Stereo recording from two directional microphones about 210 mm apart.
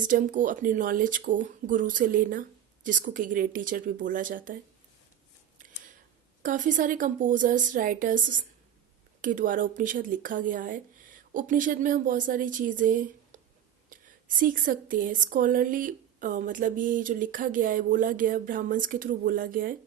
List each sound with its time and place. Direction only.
0.0 s speech: 40° right (ahead or behind)
6.4 s speech: 40° right (ahead or behind)